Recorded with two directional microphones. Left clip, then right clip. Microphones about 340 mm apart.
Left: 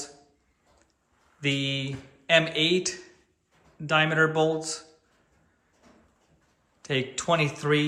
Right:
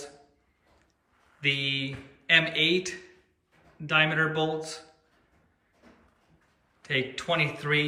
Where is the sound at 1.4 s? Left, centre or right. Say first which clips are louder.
Right 1 dB; centre.